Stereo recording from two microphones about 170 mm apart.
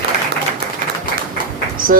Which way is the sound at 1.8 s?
55° right (ahead or behind).